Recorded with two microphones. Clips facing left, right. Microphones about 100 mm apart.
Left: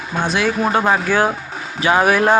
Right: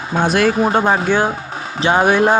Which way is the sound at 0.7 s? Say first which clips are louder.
Right 1 dB; 30° right (ahead or behind).